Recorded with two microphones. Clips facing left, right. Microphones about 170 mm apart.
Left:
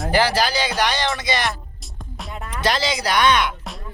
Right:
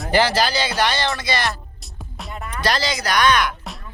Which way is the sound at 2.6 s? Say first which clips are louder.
Left 1 dB; 20° left (ahead or behind).